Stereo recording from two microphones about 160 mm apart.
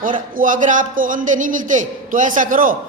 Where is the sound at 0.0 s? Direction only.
60° right (ahead or behind).